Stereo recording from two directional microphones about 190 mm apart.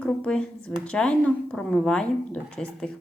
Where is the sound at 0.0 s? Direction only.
5° left (ahead or behind).